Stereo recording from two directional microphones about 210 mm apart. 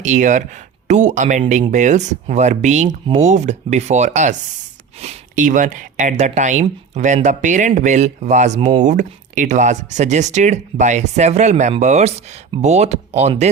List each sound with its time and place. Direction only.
0.0 s speech: 35° right (ahead or behind)